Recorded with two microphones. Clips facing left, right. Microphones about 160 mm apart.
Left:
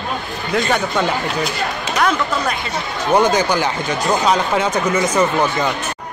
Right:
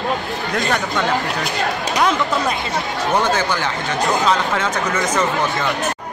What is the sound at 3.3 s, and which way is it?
Speech, 15° left (ahead or behind).